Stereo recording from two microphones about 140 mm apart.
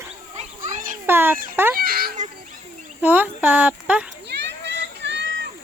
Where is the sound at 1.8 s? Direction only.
90° right.